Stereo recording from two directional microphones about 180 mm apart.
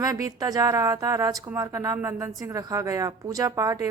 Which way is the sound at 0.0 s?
20° right (ahead or behind).